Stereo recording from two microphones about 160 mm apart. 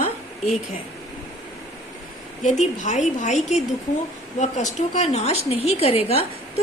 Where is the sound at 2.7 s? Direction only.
50° left (ahead or behind).